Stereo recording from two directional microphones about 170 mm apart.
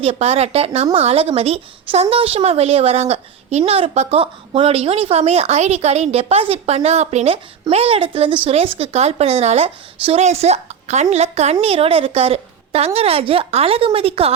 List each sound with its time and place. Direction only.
0.0 s speech: 35° right (ahead or behind)